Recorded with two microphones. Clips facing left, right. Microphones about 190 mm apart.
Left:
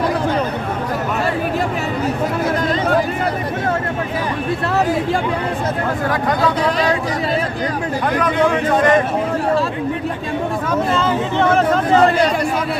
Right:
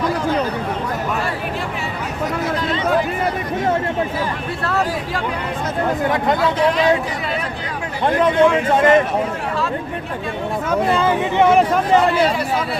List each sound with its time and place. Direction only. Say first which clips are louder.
6.1 s speech: left 2 dB; 25° right (ahead or behind)
8.2 s speech: right 3 dB; 25° right (ahead or behind)
10.9 s speech: right 1 dB; 15° right (ahead or behind)